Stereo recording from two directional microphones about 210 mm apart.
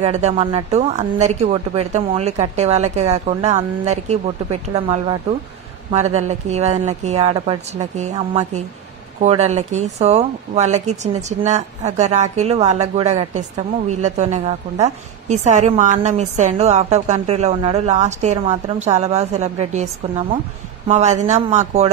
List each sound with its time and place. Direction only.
0.0 s a woman's voice: 30° right (ahead or behind)